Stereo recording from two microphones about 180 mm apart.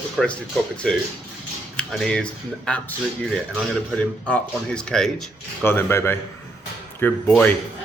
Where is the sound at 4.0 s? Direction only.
10° left (ahead or behind).